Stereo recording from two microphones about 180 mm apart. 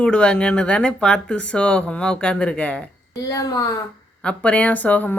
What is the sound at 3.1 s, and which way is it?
Speech, 20° left (ahead or behind).